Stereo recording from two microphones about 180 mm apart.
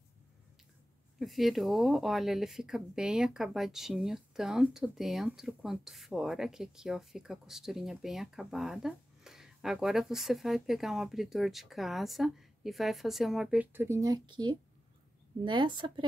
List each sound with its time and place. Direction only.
1.2 s speech: centre (ahead or behind); by 16.1 s 25° right (ahead or behind)